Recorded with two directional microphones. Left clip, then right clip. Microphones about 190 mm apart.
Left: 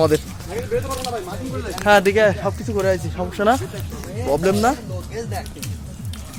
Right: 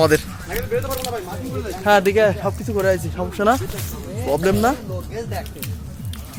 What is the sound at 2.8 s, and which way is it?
Speech, centre (ahead or behind).